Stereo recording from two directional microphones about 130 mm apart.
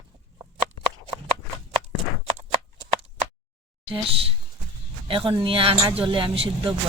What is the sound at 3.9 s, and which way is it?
Speech, 40° right (ahead or behind).